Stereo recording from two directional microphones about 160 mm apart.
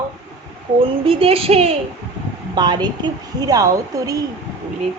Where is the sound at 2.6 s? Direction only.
25° right (ahead or behind).